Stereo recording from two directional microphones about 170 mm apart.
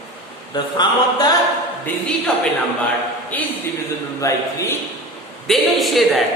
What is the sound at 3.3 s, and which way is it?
A man's voice, 10° left (ahead or behind).